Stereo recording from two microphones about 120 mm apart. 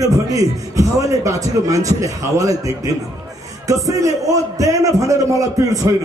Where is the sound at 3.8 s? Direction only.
25° right (ahead or behind).